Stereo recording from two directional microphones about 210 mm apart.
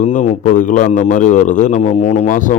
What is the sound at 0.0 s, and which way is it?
A man's voice, 35° left (ahead or behind).